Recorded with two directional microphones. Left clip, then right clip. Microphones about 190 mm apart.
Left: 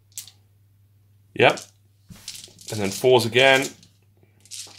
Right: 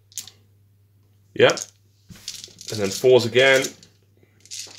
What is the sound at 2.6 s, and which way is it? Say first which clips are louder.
Speech: right 2 dB; 20° left (ahead or behind).